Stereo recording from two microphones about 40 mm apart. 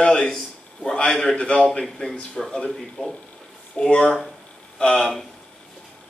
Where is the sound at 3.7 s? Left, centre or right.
Centre.